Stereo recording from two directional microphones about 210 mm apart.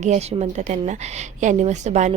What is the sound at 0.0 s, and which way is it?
A woman's voice, 30° right (ahead or behind).